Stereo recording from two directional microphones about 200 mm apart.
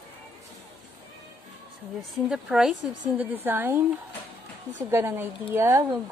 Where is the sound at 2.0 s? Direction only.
5° right (ahead or behind).